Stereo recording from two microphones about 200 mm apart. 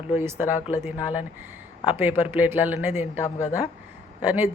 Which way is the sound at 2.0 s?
10° right (ahead or behind).